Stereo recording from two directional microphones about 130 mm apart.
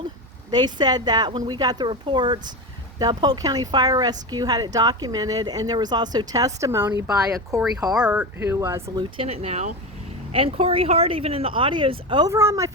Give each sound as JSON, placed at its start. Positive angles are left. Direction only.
{"t": 0.5, "sound": "speech", "side_deg": -35}
{"t": 7.9, "sound": "speech", "side_deg": -10}
{"t": 9.0, "sound": "speech", "side_deg": -45}
{"t": 12.3, "sound": "speech", "side_deg": -20}